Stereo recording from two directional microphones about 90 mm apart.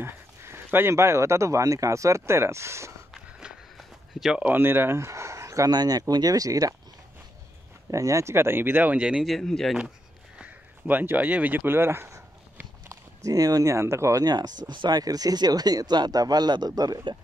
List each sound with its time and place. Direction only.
0.0 s speech: 25° right (ahead or behind)
4.1 s a sound: 5° right (ahead or behind)
4.4 s speech: 20° right (ahead or behind); by 6.7 s 40° right (ahead or behind)
7.9 s speech: 35° right (ahead or behind); by 9.2 s 15° right (ahead or behind)
9.2 s speech: centre (ahead or behind)
10.4 s a sound: 20° right (ahead or behind)
14.2 s speech: 50° right (ahead or behind)